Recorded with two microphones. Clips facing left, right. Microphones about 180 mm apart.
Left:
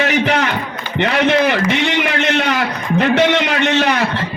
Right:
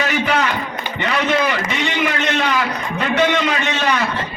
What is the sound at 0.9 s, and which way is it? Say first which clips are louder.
Speech: left 5 dB; 65° left (ahead or behind).